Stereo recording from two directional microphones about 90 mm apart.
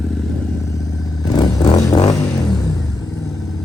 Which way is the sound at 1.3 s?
45° left (ahead or behind).